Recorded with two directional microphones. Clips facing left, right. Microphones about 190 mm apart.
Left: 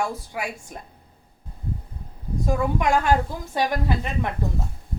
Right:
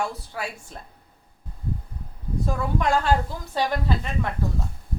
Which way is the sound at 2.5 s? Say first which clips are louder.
Left 2 dB; 15° left (ahead or behind).